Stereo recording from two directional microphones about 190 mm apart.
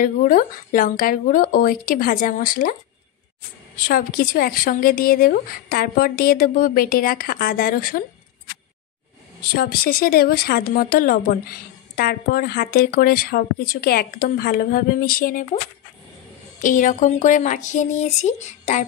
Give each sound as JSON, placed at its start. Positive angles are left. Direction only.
{"t": 0.0, "sound": "speech", "side_deg": 45}
{"t": 3.7, "sound": "speech", "side_deg": 50}
{"t": 9.5, "sound": "speech", "side_deg": 50}
{"t": 16.6, "sound": "speech", "side_deg": 45}